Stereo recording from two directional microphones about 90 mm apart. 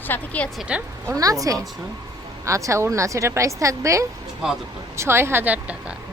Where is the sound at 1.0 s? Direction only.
40° right (ahead or behind); by 6.0 s 15° right (ahead or behind).